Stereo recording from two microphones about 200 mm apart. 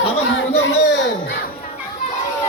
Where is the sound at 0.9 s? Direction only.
60° left (ahead or behind).